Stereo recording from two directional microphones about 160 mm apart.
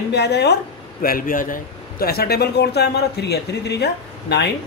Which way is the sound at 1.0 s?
60° left (ahead or behind).